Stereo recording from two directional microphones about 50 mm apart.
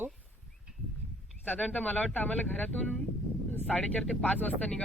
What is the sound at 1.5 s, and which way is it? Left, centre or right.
Speech, left.